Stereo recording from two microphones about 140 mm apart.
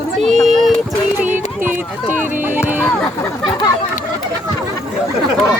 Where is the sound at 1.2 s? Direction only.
15° right (ahead or behind).